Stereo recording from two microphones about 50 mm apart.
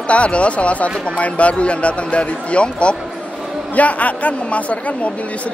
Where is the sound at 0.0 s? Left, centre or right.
Left.